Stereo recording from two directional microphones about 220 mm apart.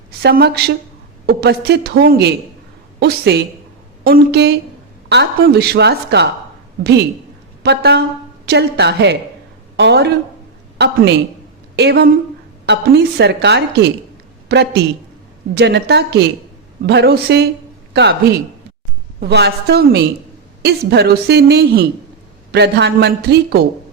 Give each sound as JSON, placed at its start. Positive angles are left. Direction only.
{"t": 0.2, "sound": "a woman's voice", "side_deg": -50}
{"t": 7.6, "sound": "a woman's voice", "side_deg": -50}